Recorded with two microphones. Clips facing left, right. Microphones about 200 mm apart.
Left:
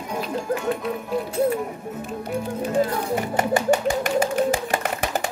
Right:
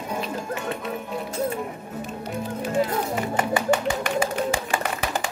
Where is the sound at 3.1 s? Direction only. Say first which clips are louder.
Left 2 dB; 45° left (ahead or behind).